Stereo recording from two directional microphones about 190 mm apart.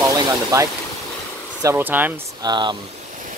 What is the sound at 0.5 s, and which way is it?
Speech, 20° right (ahead or behind).